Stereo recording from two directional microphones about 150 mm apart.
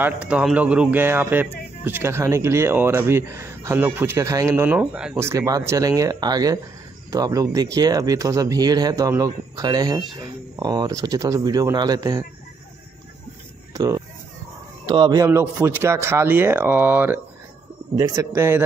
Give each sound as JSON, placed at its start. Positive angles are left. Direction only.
{"t": 0.0, "sound": "speech", "side_deg": -10}
{"t": 5.2, "sound": "speech", "side_deg": -20}
{"t": 13.7, "sound": "a sound", "side_deg": -20}
{"t": 14.9, "sound": "speech", "side_deg": -25}